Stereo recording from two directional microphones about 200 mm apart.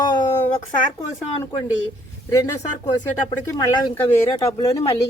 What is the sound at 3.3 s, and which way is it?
Speech, 20° left (ahead or behind).